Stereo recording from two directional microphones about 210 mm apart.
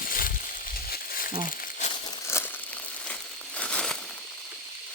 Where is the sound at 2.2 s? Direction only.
10° left (ahead or behind).